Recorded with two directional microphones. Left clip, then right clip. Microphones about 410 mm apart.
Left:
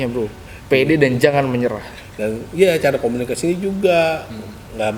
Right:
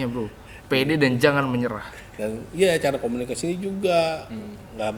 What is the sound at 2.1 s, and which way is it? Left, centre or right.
Speech, centre.